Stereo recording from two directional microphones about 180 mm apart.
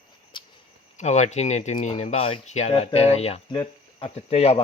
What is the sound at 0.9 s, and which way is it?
Speech, 40° left (ahead or behind).